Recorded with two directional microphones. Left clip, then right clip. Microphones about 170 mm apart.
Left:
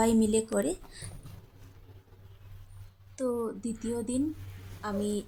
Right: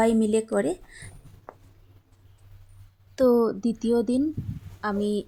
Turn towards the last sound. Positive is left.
turn(degrees=-35)  # may be behind; listen again after turning